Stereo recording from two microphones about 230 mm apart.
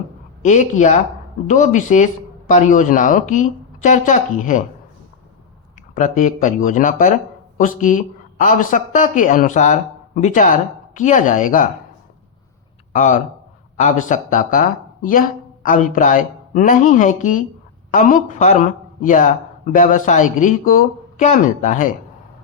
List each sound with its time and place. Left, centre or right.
0.4 s speech: left
5.9 s speech: left
12.9 s speech: left